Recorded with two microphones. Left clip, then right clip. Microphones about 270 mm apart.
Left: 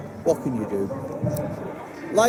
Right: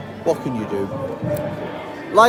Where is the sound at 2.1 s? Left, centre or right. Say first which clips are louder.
Right 6 dB; centre.